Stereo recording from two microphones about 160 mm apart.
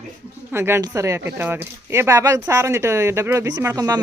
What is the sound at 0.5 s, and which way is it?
Speech, 15° right (ahead or behind).